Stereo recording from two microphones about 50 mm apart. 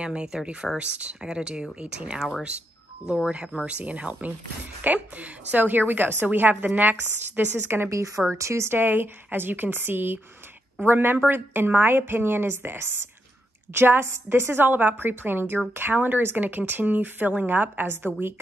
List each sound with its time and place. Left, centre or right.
0.0 s a woman's voice: centre; by 7.9 s right
7.9 s speech: right
8.4 s speech: right
8.6 s a woman's voice: right